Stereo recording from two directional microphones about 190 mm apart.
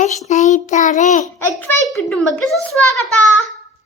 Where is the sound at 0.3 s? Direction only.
40° left (ahead or behind).